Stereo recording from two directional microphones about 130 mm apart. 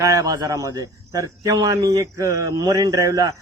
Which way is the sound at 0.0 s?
25° right (ahead or behind).